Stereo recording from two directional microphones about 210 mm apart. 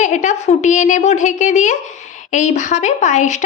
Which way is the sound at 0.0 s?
35° left (ahead or behind).